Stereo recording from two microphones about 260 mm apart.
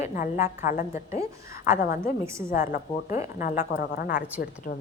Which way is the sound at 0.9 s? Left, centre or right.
Centre.